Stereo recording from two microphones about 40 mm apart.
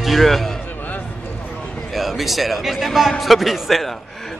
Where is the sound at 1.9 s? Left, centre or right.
Centre.